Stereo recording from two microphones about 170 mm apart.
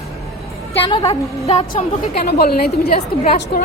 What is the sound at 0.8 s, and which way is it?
A woman's voice, 30° left (ahead or behind).